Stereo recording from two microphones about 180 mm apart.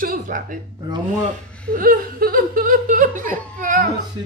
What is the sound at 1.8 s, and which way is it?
Speech, 50° right (ahead or behind).